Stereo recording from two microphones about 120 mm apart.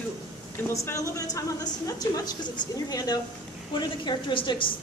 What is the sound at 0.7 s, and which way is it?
A woman's voice, 25° left (ahead or behind).